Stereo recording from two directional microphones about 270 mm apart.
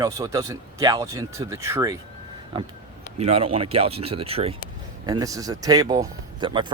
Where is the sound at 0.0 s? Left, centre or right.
Centre.